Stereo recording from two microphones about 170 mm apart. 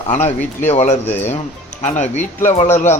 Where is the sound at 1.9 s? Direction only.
45° left (ahead or behind).